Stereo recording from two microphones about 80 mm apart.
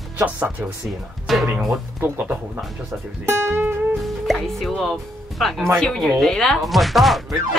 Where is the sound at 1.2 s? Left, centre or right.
Centre.